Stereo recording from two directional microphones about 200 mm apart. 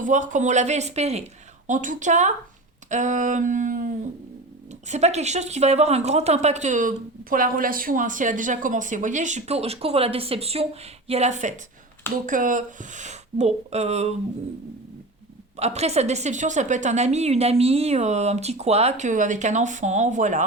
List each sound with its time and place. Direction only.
0.0 s speech: 40° right (ahead or behind)
15.5 s speech: 35° right (ahead or behind)